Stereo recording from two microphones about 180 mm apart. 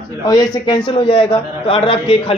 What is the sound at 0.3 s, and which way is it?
A man's voice, 25° left (ahead or behind).